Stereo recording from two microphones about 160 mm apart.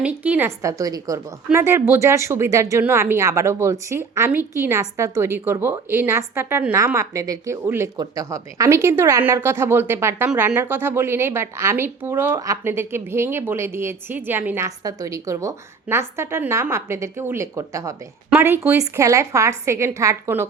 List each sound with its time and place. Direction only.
0.0 s a woman's voice: 10° right (ahead or behind)